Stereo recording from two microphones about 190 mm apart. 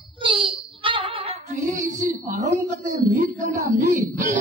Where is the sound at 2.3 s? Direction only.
40° right (ahead or behind).